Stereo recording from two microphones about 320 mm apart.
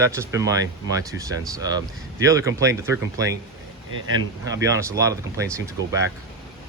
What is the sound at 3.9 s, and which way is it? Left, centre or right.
Speech, right.